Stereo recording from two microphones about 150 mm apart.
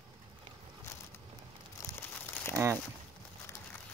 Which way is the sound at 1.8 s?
15° left (ahead or behind).